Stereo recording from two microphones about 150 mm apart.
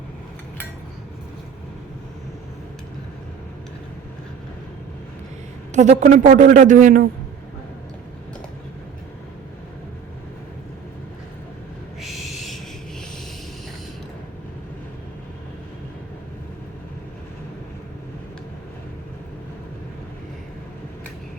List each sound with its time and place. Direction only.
5.7 s a man's voice: 50° right (ahead or behind)
11.9 s owl: centre (ahead or behind)